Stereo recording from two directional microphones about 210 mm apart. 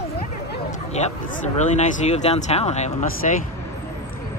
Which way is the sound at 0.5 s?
35° left (ahead or behind).